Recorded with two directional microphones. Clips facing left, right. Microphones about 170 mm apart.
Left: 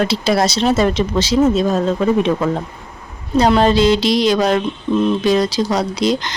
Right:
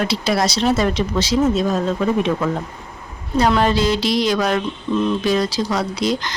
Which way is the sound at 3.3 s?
25° left (ahead or behind).